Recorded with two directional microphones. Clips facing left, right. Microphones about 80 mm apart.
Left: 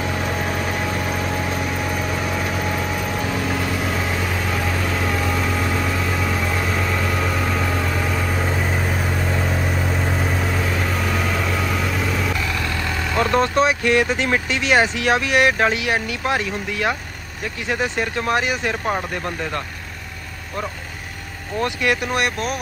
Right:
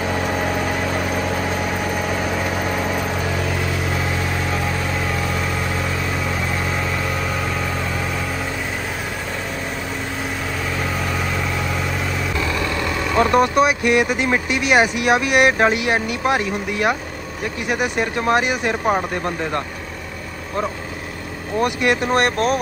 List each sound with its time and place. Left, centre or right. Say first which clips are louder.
12.4 s speech: right 3 dB; centre
21.5 s speech: right 2 dB; right
22.1 s speech: right 5 dB; right